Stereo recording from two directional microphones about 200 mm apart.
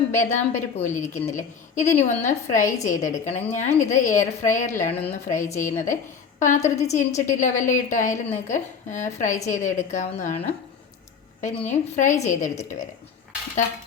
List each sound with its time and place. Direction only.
0.2 s a woman's voice: 35° left (ahead or behind)
11.7 s a woman's voice: 40° left (ahead or behind)